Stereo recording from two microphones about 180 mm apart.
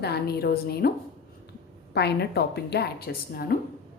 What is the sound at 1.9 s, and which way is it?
A woman's voice, 65° left (ahead or behind).